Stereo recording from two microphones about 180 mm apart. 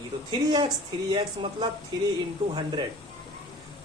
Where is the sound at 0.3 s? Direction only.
20° right (ahead or behind).